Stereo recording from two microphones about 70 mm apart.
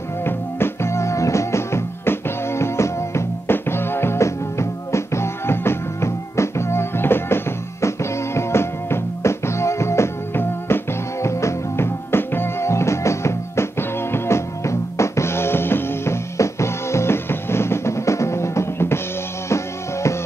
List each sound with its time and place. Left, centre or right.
0.2 s music: left